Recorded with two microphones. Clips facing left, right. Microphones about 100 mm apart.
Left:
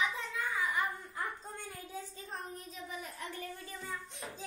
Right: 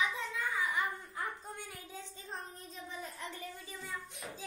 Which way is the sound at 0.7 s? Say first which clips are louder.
Left 1 dB; 20° left (ahead or behind).